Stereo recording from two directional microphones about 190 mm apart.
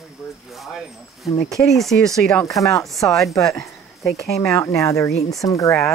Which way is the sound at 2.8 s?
Centre (ahead or behind).